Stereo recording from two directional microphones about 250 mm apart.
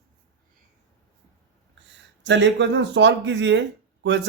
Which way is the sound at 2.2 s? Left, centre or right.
Right.